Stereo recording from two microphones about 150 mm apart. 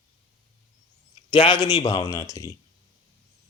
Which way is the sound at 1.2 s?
35° left (ahead or behind).